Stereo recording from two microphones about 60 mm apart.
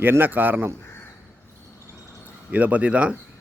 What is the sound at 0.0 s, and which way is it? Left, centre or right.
Speech, right.